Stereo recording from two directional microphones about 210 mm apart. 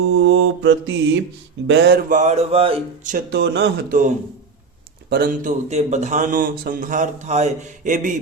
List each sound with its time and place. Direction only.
0.2 s mantra: 70° right (ahead or behind)
2.0 s speech: 35° right (ahead or behind)
3.2 s speech: 55° right (ahead or behind); by 8.2 s 40° right (ahead or behind)